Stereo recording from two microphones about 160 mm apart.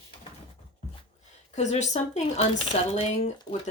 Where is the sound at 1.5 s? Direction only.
45° left (ahead or behind).